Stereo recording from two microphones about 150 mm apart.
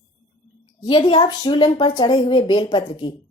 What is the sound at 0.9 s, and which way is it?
A woman's voice, 35° left (ahead or behind).